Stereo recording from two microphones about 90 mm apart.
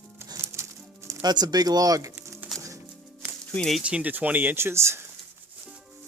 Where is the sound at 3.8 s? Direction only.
15° right (ahead or behind); by 5.1 s 30° right (ahead or behind).